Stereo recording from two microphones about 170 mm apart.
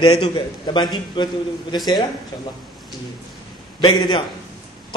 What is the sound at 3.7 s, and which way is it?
Speech, 25° left (ahead or behind).